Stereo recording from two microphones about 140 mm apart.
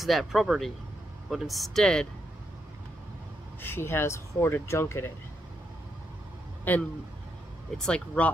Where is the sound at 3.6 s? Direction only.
15° left (ahead or behind).